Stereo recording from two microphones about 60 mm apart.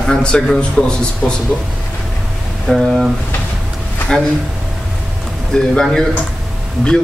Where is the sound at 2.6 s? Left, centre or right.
Centre.